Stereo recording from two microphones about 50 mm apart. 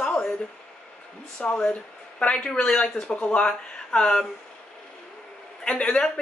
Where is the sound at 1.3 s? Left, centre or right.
Centre.